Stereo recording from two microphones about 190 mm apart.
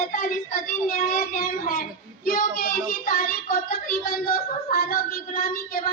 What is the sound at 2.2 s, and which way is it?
Child singing, 50° left (ahead or behind).